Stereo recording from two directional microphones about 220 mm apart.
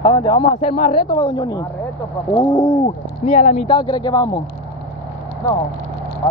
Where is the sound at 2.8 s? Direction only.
30° left (ahead or behind).